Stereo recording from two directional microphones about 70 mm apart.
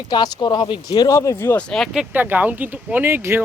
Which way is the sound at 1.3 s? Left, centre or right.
Left.